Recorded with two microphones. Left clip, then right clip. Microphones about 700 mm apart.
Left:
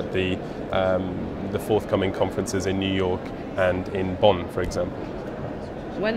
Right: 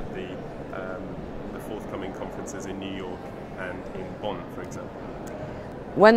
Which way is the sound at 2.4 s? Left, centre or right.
Left.